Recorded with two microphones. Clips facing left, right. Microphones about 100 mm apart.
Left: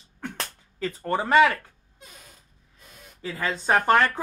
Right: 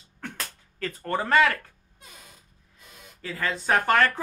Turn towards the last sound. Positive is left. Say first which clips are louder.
# left 2 dB
turn(degrees=20)  # may be behind; listen again after turning